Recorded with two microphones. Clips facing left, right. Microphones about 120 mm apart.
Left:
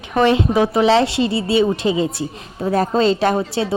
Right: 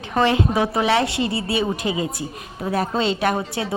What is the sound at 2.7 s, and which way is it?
Speech, 40° left (ahead or behind).